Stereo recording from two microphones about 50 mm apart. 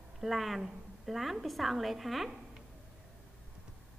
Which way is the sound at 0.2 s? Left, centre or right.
Centre.